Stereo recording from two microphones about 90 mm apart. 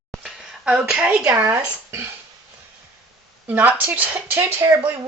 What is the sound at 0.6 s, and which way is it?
A woman's voice, 10° right (ahead or behind).